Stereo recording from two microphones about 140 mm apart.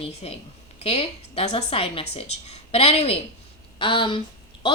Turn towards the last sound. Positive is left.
turn(degrees=40)  # may be behind; listen again after turning